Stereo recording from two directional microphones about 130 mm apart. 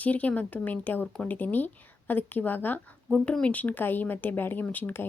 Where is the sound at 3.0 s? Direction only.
5° left (ahead or behind).